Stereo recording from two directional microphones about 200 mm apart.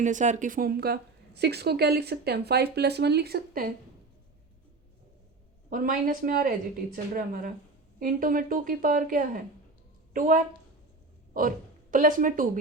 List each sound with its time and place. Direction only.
0.0 s a woman's voice: 40° right (ahead or behind)
5.7 s a woman's voice: 45° right (ahead or behind)